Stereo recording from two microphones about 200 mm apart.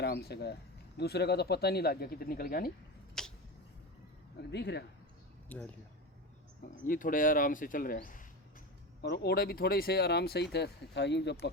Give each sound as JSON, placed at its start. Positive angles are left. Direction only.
{"t": 0.0, "sound": "speech", "side_deg": 55}
{"t": 3.2, "sound": "a sound", "side_deg": 5}
{"t": 4.5, "sound": "speech", "side_deg": 60}
{"t": 5.5, "sound": "speech", "side_deg": 10}
{"t": 6.8, "sound": "speech", "side_deg": 45}